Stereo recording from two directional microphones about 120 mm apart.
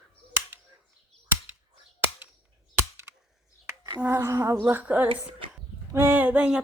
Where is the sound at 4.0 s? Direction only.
20° right (ahead or behind).